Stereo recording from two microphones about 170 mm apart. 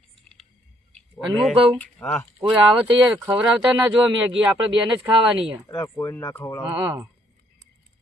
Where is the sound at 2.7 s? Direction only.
5° right (ahead or behind).